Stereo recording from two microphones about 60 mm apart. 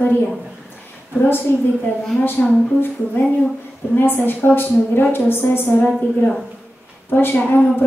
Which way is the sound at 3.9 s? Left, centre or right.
Left.